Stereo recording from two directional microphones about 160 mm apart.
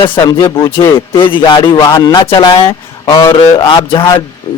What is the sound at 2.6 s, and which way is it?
A man's voice, 20° left (ahead or behind).